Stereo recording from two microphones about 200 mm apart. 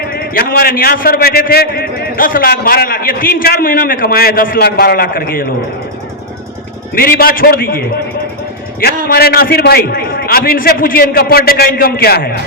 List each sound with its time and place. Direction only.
0.1 s a man's voice: 50° left (ahead or behind)
6.9 s a man's voice: 50° left (ahead or behind)